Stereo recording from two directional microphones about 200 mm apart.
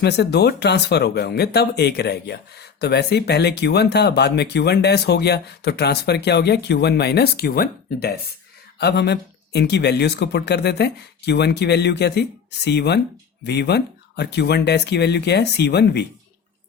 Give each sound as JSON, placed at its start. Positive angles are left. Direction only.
{"t": 0.0, "sound": "speech", "side_deg": 55}